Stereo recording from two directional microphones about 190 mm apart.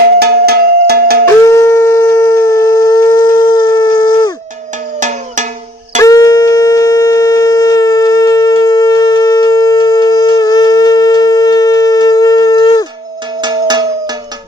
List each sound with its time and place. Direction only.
0.0 s music: 55° right (ahead or behind)
1.5 s shofar: 15° left (ahead or behind)
4.9 s cowbell: 40° right (ahead or behind)
6.0 s shofar: 20° left (ahead or behind)
13.4 s cowbell: 20° right (ahead or behind)